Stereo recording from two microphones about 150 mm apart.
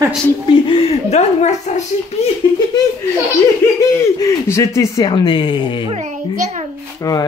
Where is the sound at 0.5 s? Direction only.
35° left (ahead or behind).